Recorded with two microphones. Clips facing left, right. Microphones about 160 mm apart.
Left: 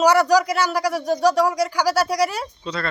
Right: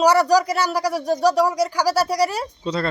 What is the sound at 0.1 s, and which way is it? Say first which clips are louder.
Speech: even; 30° right (ahead or behind).